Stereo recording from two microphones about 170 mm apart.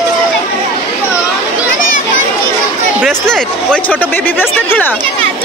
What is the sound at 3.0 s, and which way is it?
Speech, 5° left (ahead or behind).